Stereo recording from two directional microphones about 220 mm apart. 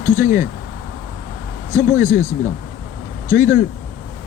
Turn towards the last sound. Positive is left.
turn(degrees=-10)  # may be behind; listen again after turning